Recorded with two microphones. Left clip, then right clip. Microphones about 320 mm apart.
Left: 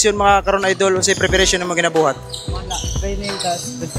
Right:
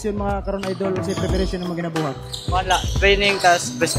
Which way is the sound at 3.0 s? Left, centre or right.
Centre.